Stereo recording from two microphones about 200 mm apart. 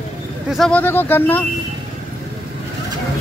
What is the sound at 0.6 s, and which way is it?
Speech, 10° left (ahead or behind).